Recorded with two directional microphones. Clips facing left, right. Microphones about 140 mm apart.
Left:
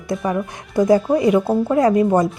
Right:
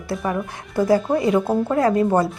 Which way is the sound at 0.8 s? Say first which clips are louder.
Left 3 dB; 20° left (ahead or behind).